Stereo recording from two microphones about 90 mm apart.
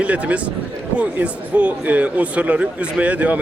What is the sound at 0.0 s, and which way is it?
Speech, 15° right (ahead or behind).